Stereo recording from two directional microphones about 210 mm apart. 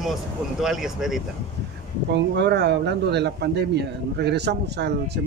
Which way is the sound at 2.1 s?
55° right (ahead or behind).